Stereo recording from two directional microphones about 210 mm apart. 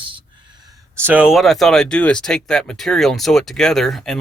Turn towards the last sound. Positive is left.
turn(degrees=0)  # may be behind; listen again after turning